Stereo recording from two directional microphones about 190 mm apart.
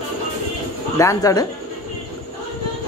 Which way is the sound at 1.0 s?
15° left (ahead or behind).